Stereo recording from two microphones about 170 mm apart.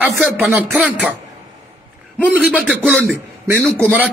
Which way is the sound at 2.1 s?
10° left (ahead or behind).